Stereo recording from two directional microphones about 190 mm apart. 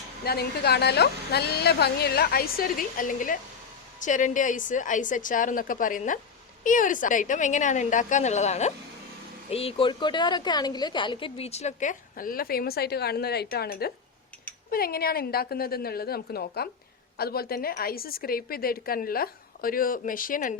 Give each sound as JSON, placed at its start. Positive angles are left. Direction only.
{"t": 0.3, "sound": "a woman's voice", "side_deg": 55}